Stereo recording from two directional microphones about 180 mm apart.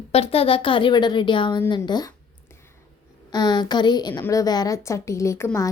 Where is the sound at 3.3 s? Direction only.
25° left (ahead or behind).